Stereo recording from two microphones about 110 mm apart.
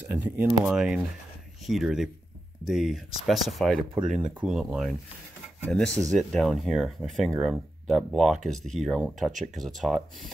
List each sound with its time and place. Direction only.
0.0 s speech: 15° right (ahead or behind)
0.7 s speech: 5° right (ahead or behind)
7.3 s speech: 10° right (ahead or behind)